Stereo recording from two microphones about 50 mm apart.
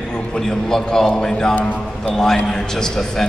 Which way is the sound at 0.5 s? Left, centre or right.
Centre.